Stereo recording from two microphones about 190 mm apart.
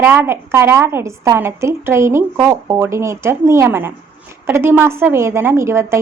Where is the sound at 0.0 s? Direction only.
10° right (ahead or behind).